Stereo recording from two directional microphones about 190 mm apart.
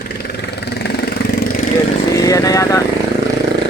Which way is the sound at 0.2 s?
60° left (ahead or behind).